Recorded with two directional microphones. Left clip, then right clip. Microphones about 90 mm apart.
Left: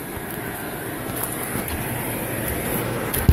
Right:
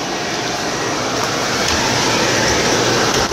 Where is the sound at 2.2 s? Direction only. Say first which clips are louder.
Right 13 dB; 35° right (ahead or behind).